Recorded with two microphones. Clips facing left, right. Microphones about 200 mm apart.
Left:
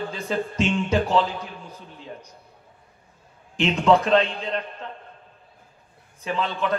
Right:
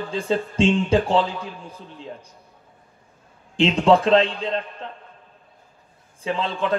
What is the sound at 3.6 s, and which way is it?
Speech, 30° right (ahead or behind).